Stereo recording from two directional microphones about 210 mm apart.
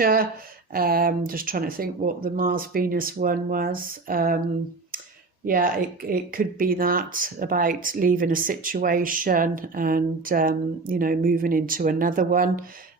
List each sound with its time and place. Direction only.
0.0 s speech: 45° right (ahead or behind)
5.5 s speech: 40° right (ahead or behind)